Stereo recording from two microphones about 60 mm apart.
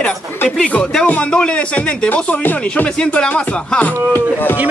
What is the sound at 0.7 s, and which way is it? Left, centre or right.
Speech, left.